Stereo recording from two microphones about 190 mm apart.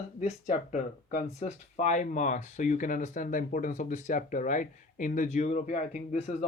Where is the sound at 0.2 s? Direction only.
40° left (ahead or behind).